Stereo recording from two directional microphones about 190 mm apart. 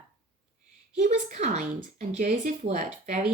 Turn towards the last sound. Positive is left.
turn(degrees=-40)  # may be behind; listen again after turning